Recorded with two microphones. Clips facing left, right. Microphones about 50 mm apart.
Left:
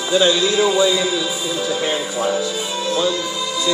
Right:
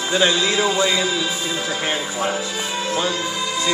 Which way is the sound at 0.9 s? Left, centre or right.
Right.